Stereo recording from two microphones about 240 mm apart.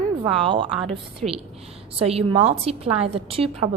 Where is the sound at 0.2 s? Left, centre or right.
Right.